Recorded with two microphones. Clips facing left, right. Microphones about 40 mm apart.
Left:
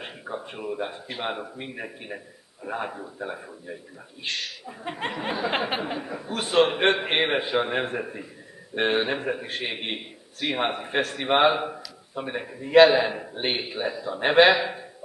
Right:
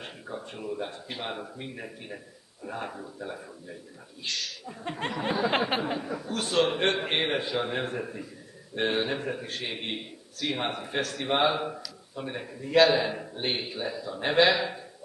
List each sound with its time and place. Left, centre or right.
0.0 s a sound: left
1.2 s speech: left
4.6 s speech: centre